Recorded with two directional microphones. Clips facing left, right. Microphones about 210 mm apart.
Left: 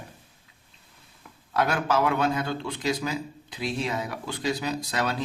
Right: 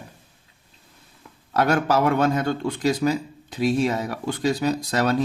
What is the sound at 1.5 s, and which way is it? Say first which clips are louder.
Speech: right 5 dB; 45° right (ahead or behind).